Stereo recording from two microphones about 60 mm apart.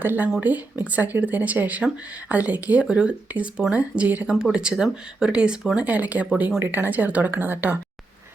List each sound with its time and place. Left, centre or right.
0.0 s speech: right
4.5 s speech: centre; by 7.8 s right